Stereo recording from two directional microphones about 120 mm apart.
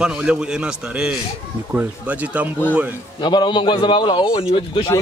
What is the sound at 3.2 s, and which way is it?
A man's voice, 40° left (ahead or behind).